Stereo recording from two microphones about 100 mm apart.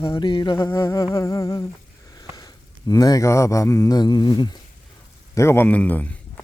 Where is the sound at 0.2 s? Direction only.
50° left (ahead or behind).